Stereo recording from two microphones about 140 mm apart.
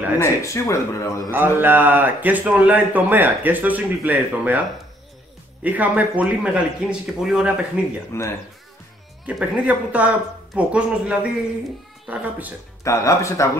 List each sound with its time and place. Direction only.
0.2 s speech: 20° left (ahead or behind)
1.3 s a man's voice: 15° right (ahead or behind)
5.6 s a man's voice: 10° right (ahead or behind)
8.1 s speech: 20° left (ahead or behind)
9.2 s a man's voice: 10° right (ahead or behind)
12.8 s speech: 20° left (ahead or behind)